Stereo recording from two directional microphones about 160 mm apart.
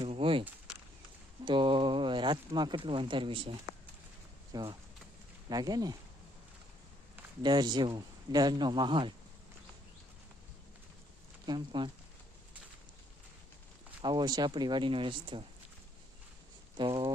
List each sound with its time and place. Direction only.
0.0 s speech: 35° right (ahead or behind)
1.5 s speech: 30° right (ahead or behind)
4.5 s speech: 25° right (ahead or behind)
7.4 s speech: 25° right (ahead or behind)
11.4 s speech: 30° right (ahead or behind)
14.0 s speech: 25° right (ahead or behind)
16.7 s speech: 30° right (ahead or behind)